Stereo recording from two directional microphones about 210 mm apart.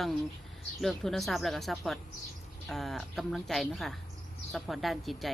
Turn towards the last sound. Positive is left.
turn(degrees=0)  # may be behind; listen again after turning